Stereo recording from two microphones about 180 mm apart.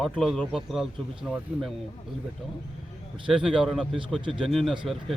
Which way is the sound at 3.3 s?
5° right (ahead or behind).